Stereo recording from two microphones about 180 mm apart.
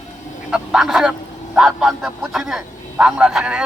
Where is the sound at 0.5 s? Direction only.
5° right (ahead or behind).